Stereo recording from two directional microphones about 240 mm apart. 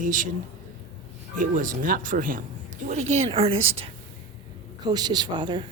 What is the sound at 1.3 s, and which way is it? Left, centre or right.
Speech, right.